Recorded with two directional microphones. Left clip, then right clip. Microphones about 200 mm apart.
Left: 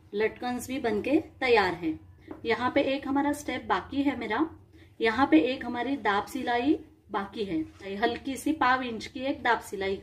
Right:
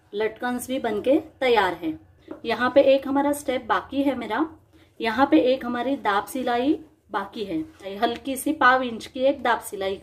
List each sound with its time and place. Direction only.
0.1 s a woman's voice: 15° right (ahead or behind)